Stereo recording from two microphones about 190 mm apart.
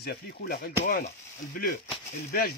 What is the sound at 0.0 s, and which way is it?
Speech, 55° left (ahead or behind).